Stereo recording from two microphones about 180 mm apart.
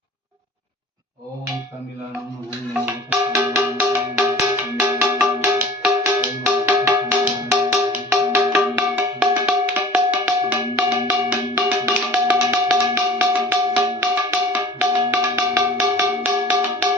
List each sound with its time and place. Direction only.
2.8 s music: 10° right (ahead or behind)